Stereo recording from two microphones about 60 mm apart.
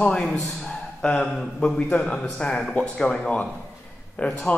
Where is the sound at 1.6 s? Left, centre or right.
Centre.